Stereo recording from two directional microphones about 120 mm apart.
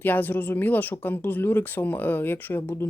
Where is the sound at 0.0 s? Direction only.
15° left (ahead or behind).